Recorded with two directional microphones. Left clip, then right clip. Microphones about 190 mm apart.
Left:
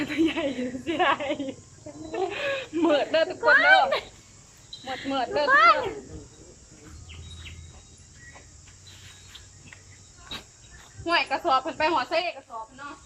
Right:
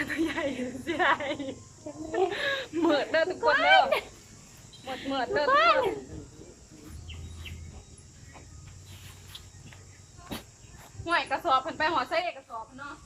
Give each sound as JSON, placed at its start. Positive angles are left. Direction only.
{"t": 0.0, "sound": "a woman's voice", "side_deg": 10}
{"t": 5.1, "sound": "a woman's voice", "side_deg": 5}
{"t": 5.5, "sound": "a child's voice", "side_deg": -15}
{"t": 10.3, "sound": "a sound", "side_deg": -35}
{"t": 11.0, "sound": "a woman's voice", "side_deg": 5}